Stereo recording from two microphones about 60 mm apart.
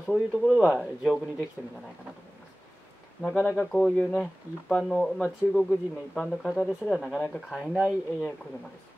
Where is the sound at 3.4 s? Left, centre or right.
Left.